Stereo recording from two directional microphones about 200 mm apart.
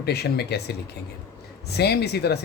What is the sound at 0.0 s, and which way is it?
Speech, 55° left (ahead or behind).